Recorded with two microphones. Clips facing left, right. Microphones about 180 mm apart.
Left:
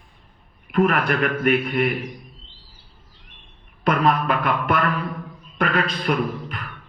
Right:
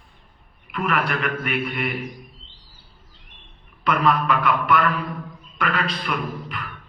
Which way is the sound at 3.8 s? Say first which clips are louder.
Left 1 dB; 45° left (ahead or behind).